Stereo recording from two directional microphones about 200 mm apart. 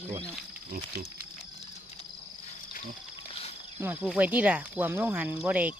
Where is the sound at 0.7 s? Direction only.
50° right (ahead or behind).